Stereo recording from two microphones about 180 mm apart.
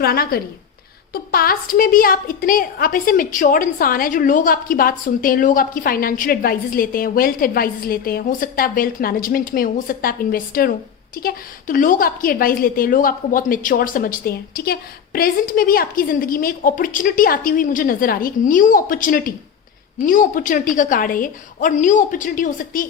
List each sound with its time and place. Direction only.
0.0 s a woman's voice: 60° left (ahead or behind)